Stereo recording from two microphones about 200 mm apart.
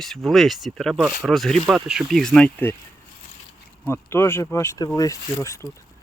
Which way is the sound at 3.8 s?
10° left (ahead or behind).